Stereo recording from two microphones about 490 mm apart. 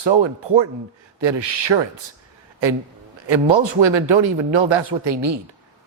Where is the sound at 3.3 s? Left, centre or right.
Right.